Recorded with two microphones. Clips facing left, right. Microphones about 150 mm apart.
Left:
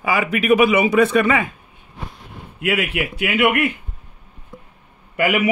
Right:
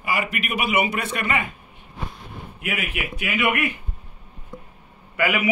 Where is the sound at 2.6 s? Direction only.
75° left (ahead or behind).